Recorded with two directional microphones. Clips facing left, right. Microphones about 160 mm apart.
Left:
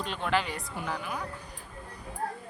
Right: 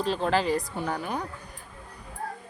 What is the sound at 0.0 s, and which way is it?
Speech, 35° right (ahead or behind).